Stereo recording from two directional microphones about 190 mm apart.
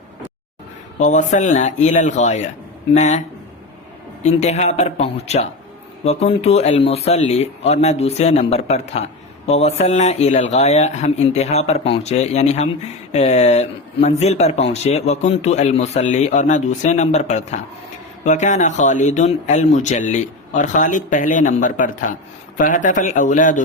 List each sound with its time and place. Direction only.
0.9 s a man's voice: 40° left (ahead or behind)